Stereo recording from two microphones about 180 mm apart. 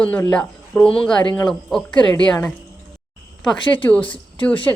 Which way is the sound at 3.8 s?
10° left (ahead or behind).